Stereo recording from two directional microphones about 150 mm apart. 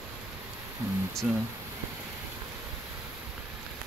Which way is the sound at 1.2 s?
5° right (ahead or behind).